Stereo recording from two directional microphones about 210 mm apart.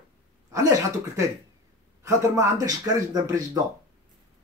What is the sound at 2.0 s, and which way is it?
Speech, 15° right (ahead or behind).